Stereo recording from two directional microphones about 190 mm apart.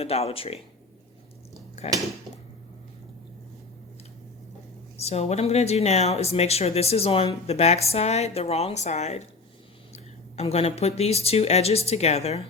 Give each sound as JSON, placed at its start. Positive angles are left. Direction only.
{"t": 0.0, "sound": "speech", "side_deg": 30}
{"t": 4.9, "sound": "speech", "side_deg": 30}